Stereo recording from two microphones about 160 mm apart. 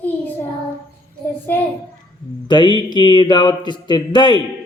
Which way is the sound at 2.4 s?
30° left (ahead or behind).